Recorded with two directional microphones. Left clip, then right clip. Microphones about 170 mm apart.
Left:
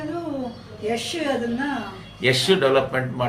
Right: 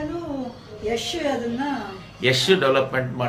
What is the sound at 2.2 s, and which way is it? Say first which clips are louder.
Speech: even; 10° right (ahead or behind).